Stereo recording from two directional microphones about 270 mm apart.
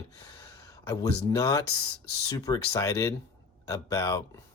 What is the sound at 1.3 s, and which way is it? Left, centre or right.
Speech, centre.